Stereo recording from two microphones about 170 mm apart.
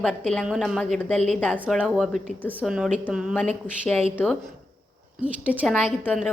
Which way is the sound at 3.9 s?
5° left (ahead or behind).